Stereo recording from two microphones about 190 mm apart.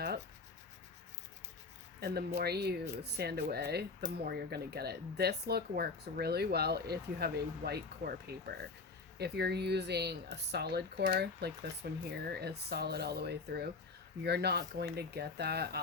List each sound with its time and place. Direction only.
2.0 s speech: 60° right (ahead or behind)